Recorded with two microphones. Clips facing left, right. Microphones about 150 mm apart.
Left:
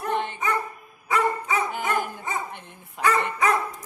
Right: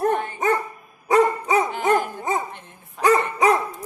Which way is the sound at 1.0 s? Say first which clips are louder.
Right 6 dB; 35° right (ahead or behind).